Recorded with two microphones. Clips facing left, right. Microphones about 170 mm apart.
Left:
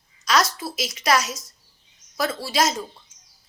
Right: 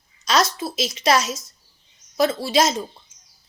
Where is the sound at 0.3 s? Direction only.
25° right (ahead or behind).